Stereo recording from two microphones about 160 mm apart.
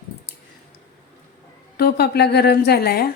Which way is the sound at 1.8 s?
90° left.